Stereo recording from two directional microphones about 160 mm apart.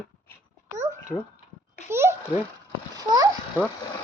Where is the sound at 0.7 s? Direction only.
20° right (ahead or behind).